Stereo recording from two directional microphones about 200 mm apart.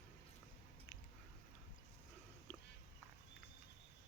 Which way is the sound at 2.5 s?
10° left (ahead or behind).